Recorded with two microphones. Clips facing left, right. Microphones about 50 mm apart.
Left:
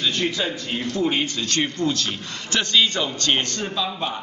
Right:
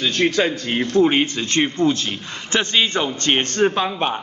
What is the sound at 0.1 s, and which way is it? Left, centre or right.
A man's voice, right.